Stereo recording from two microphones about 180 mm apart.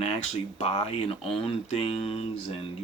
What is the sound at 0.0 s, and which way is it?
Speech, 35° left (ahead or behind).